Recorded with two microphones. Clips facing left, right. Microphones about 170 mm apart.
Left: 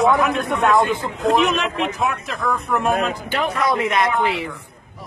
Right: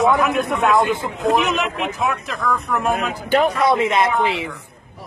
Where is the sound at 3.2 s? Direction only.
45° right (ahead or behind).